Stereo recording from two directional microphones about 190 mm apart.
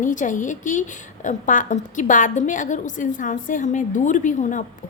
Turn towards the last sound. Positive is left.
turn(degrees=40)  # may be behind; listen again after turning